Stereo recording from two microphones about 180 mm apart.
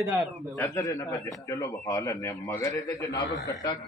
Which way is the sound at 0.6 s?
15° left (ahead or behind).